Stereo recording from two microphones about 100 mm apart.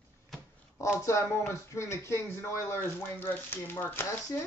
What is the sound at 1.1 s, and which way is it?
Speech, 30° left (ahead or behind).